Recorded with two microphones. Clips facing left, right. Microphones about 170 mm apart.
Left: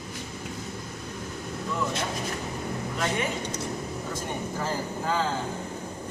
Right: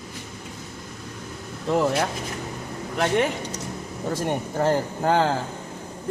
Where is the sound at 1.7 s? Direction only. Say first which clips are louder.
Right 9 dB; 90° right.